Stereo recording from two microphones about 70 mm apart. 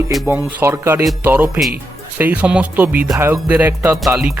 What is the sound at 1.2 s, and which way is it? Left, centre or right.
Music, right.